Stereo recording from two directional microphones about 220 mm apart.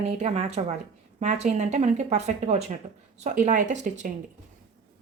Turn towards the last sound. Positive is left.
turn(degrees=-35)  # may be behind; listen again after turning